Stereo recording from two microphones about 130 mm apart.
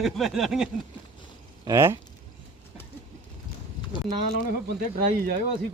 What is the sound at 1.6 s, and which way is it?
Speech, 25° right (ahead or behind).